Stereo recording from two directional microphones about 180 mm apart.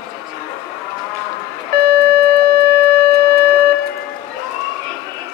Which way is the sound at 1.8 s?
60° right (ahead or behind).